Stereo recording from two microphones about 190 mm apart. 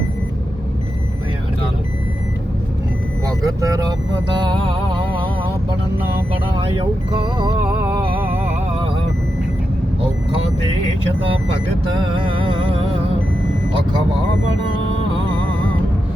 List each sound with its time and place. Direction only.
3.2 s speech: 20° right (ahead or behind)
4.4 s music: 25° right (ahead or behind)
7.9 s music: 10° right (ahead or behind)
11.9 s music: 25° right (ahead or behind)